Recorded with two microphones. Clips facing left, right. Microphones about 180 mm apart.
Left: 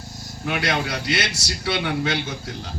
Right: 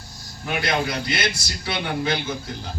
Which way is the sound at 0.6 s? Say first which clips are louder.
Right 3 dB; 75° left (ahead or behind).